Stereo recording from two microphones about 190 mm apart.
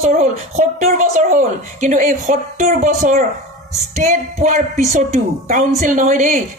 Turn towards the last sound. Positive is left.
turn(degrees=-45)  # may be behind; listen again after turning